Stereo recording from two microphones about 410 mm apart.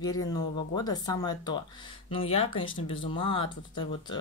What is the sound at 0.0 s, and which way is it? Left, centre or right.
Speech, centre.